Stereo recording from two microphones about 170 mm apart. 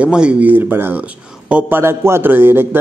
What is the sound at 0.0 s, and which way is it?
Speech, 5° right (ahead or behind).